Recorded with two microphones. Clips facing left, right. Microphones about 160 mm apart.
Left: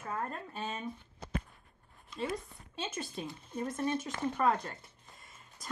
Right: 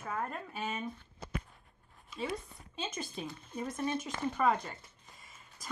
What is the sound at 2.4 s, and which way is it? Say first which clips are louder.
Speech: left 1 dB; centre (ahead or behind).